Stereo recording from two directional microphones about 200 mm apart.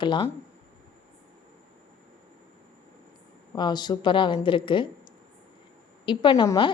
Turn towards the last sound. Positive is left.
turn(degrees=25)  # may be behind; listen again after turning